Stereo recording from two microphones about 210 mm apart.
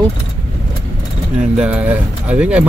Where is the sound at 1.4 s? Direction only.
5° right (ahead or behind).